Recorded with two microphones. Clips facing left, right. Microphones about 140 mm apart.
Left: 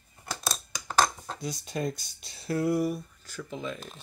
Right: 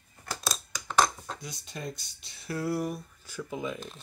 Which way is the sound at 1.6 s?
50° left (ahead or behind).